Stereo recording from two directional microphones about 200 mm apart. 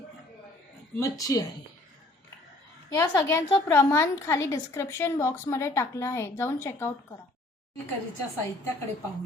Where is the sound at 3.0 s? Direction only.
15° left (ahead or behind).